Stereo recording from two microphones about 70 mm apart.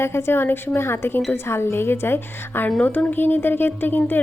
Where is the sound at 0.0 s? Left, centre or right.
Left.